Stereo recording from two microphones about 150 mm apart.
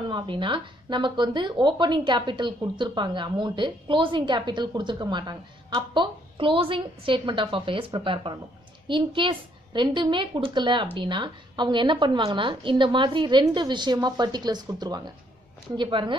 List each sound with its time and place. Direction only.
0.1 s a woman's voice: 35° right (ahead or behind)